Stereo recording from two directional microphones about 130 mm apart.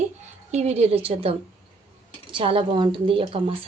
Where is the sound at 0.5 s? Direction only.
55° right (ahead or behind).